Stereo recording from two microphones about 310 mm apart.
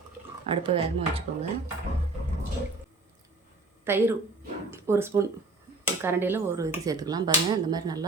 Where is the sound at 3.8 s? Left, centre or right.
Centre.